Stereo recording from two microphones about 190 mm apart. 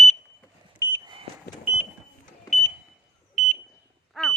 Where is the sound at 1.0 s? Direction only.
25° right (ahead or behind).